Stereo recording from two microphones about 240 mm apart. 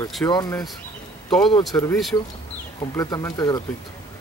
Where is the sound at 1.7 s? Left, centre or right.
Centre.